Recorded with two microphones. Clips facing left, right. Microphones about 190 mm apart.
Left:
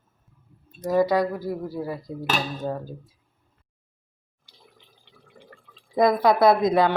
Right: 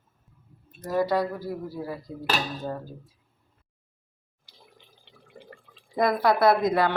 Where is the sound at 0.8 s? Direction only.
15° left (ahead or behind).